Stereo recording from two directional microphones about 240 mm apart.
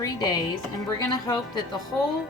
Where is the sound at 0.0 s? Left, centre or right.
Centre.